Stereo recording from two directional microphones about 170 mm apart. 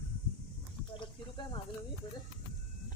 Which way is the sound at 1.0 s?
25° left (ahead or behind).